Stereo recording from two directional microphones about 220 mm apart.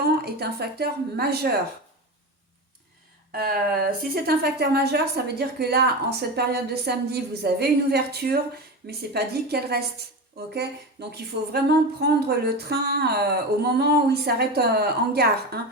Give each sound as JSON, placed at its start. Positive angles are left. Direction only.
{"t": 0.0, "sound": "speech", "side_deg": -45}
{"t": 3.3, "sound": "speech", "side_deg": -45}
{"t": 11.1, "sound": "speech", "side_deg": -45}